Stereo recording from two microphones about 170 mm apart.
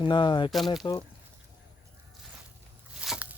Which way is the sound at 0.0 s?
30° left (ahead or behind).